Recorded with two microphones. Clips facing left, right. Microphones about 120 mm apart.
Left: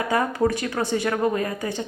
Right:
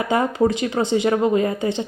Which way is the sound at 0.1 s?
20° right (ahead or behind).